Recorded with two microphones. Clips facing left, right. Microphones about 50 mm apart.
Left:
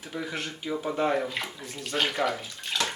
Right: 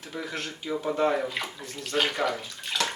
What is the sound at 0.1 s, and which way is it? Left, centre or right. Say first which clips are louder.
Speech: left 1 dB; centre.